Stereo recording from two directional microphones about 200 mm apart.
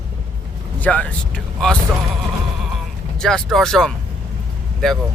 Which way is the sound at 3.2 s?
5° left (ahead or behind).